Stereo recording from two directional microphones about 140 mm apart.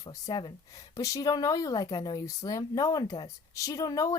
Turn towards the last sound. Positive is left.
turn(degrees=25)  # may be behind; listen again after turning